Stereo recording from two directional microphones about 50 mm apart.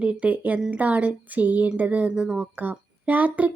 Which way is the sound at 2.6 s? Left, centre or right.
Right.